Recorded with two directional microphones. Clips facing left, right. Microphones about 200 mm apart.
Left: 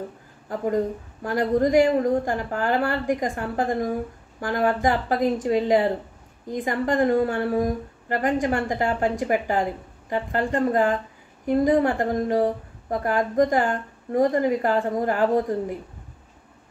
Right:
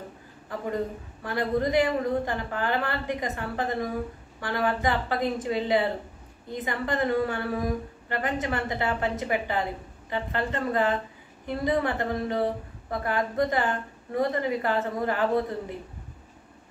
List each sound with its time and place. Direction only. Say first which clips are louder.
1.2 s a woman's voice: left 5 dB; 45° left (ahead or behind)